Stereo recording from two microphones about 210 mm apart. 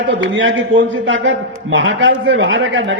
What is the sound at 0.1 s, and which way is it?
A man's voice, 65° right (ahead or behind).